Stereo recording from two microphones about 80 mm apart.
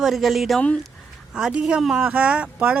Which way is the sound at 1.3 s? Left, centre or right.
Centre.